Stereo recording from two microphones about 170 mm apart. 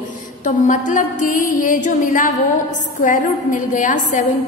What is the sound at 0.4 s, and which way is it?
A woman's voice, 50° left (ahead or behind).